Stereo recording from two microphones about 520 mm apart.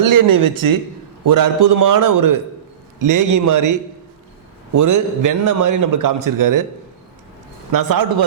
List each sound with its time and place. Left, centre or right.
0.0 s a man's voice: right
7.7 s a man's voice: right